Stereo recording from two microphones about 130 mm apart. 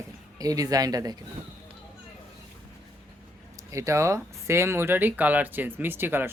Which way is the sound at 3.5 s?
25° right (ahead or behind).